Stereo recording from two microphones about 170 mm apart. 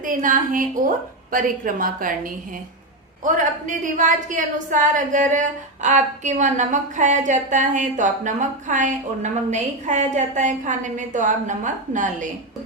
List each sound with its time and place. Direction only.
0.0 s a woman's voice: 50° right (ahead or behind)